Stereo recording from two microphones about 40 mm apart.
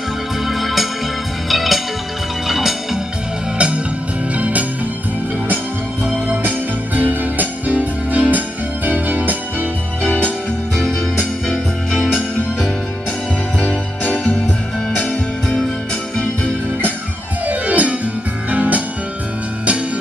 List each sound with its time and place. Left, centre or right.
0.5 s organ: centre
1.5 s music: centre
3.5 s music: right
4.4 s music: right
7.0 s music: right
10.0 s music: left
10.8 s music: centre
13.6 s music: left
17.5 s music: right